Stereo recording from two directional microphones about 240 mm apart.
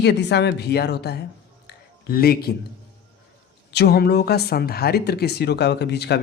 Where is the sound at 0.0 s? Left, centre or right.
Left.